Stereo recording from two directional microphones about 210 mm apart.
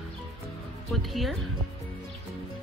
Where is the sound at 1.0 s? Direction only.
Centre (ahead or behind).